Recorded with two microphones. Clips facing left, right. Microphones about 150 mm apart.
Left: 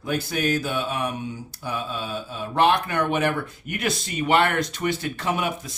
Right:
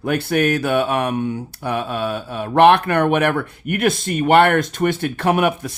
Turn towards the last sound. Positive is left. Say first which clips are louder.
# right 8 dB
turn(degrees=-60)  # may be behind; listen again after turning